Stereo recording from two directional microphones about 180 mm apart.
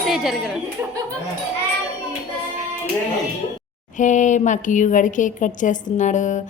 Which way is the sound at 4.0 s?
45° left (ahead or behind).